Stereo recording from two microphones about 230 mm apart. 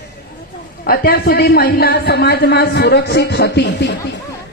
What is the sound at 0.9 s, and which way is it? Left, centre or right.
A woman's voice, left.